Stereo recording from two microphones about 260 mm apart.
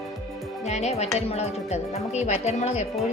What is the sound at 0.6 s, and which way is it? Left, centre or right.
Speech, left.